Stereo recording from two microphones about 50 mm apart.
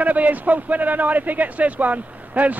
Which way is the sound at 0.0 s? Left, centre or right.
Right.